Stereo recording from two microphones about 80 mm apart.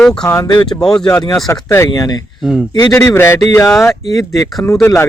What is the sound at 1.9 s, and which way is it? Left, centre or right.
Speech, left.